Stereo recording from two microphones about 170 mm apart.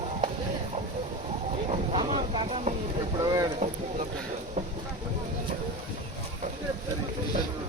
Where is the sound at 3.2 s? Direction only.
20° right (ahead or behind).